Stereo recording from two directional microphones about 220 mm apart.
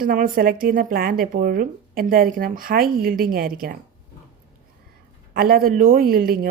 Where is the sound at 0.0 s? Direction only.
40° right (ahead or behind).